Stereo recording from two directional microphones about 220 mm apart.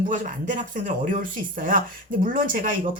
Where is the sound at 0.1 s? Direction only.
35° right (ahead or behind).